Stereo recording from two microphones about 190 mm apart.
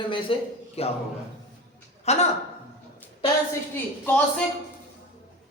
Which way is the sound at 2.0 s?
35° left (ahead or behind).